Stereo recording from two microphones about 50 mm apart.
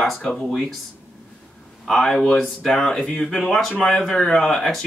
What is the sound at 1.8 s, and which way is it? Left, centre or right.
Speech, centre.